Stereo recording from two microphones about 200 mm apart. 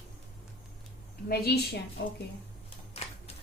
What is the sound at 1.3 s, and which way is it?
Speech, 50° left (ahead or behind).